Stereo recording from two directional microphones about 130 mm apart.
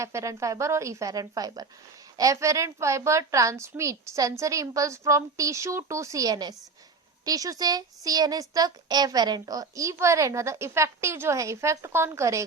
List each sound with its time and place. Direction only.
0.0 s speech: 20° right (ahead or behind)